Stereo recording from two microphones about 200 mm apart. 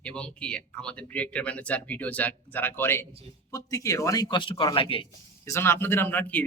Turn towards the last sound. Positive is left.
turn(degrees=10)  # may be behind; listen again after turning